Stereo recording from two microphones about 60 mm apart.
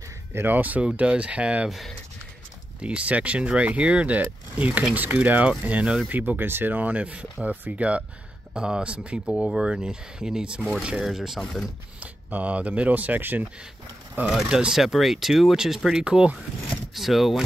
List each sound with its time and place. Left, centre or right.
0.3 s speech: right
2.8 s speech: centre
12.0 s speech: right
14.5 s speech: centre
16.9 s speech: centre